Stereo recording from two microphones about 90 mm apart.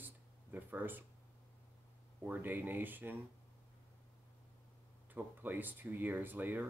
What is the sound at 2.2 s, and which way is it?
Speech, 20° right (ahead or behind).